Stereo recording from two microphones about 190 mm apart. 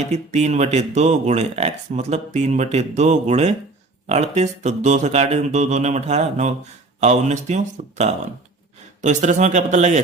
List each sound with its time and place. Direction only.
0.0 s speech: 35° right (ahead or behind)